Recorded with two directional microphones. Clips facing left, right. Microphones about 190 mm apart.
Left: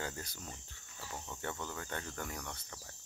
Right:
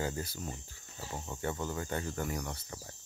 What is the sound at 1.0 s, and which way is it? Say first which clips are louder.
Speech: right 4 dB; 20° right (ahead or behind).